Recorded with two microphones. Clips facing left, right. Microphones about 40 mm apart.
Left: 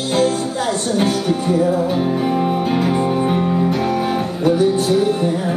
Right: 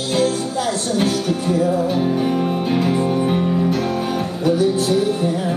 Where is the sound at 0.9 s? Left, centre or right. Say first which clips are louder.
Left 2 dB; centre.